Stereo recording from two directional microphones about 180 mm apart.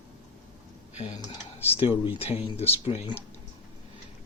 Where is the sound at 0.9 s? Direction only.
40° left (ahead or behind).